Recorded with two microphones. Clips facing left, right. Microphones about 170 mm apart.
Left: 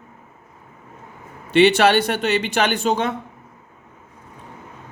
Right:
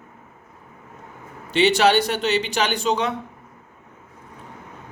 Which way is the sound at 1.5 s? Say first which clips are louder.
Left 3 dB; 60° left (ahead or behind).